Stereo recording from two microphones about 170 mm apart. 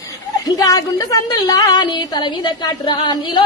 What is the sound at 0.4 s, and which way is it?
A woman's voice, 20° left (ahead or behind).